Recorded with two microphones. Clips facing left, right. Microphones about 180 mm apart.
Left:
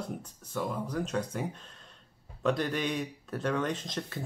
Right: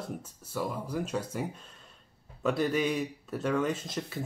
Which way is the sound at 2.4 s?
5° right (ahead or behind).